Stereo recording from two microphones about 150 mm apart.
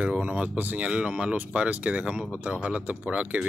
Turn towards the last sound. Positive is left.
turn(degrees=-5)  # may be behind; listen again after turning